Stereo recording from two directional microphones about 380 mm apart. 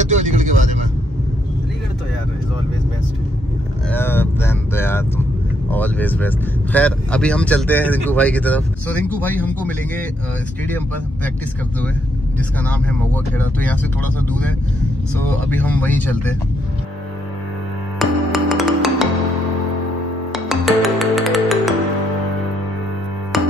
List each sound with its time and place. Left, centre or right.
0.0 s vehicle: centre
3.9 s speech: centre
12.4 s speech: centre
15.5 s speech: centre
17.9 s music: centre
20.3 s music: centre
23.3 s music: centre